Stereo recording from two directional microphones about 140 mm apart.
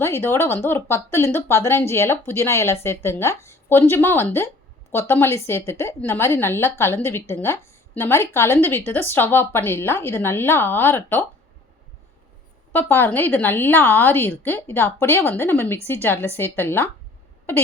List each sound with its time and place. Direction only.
0.0 s a woman's voice: 15° left (ahead or behind)
12.7 s a woman's voice: 15° left (ahead or behind)